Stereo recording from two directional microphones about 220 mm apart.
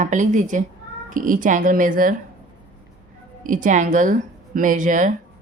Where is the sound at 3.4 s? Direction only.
35° right (ahead or behind).